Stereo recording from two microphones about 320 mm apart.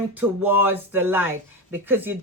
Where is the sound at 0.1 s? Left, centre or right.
Centre.